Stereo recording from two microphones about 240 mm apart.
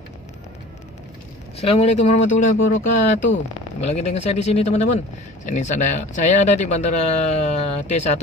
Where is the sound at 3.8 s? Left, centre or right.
Left.